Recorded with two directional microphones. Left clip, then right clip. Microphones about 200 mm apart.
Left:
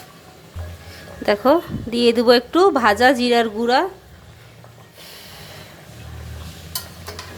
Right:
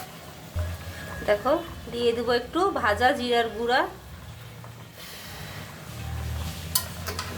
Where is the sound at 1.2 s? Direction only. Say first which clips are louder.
Left 7 dB; 45° left (ahead or behind).